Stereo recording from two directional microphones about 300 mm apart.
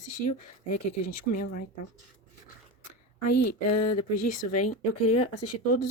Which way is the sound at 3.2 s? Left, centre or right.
Left.